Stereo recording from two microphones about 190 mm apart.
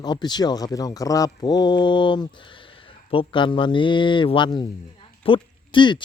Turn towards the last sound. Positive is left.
turn(degrees=25)  # may be behind; listen again after turning